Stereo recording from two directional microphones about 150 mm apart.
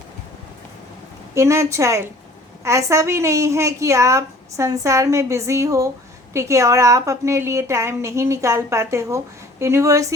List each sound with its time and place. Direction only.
1.4 s a woman's voice: 20° right (ahead or behind)